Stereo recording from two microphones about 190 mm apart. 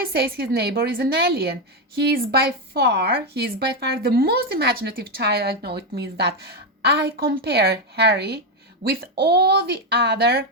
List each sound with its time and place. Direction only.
0.1 s speech: 55° right (ahead or behind)